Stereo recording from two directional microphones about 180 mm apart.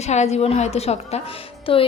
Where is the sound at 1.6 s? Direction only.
30° left (ahead or behind).